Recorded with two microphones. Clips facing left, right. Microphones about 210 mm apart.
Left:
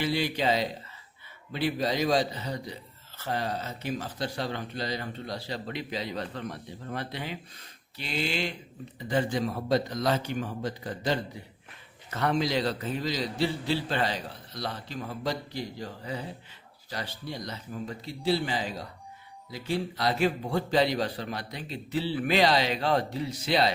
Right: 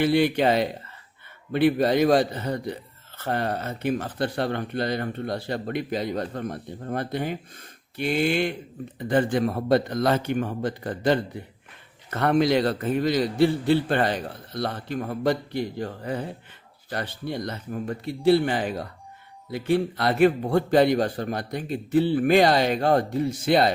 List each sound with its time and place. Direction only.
0.0 s speech: 60° right (ahead or behind)